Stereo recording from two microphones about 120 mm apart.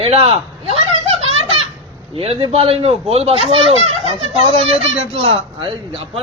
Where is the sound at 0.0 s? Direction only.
55° right (ahead or behind).